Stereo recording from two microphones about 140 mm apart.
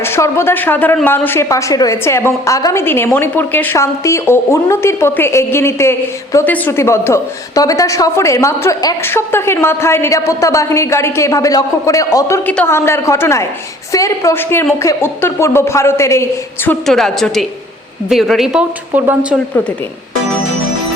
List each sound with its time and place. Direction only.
0.0 s a woman's voice: 15° left (ahead or behind)
16.8 s a woman's voice: 5° left (ahead or behind)